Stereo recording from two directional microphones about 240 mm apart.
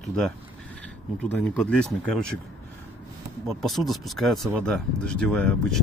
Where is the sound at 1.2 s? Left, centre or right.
Centre.